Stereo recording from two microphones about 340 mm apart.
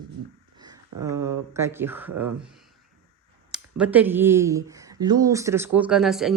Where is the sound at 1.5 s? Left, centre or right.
Centre.